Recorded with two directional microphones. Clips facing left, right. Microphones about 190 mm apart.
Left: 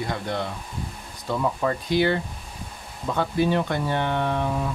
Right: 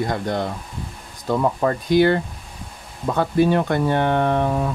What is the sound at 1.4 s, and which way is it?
Speech, 50° right (ahead or behind).